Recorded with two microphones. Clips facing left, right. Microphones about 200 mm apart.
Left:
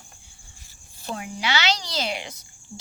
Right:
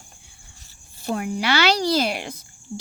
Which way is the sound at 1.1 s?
55° right (ahead or behind).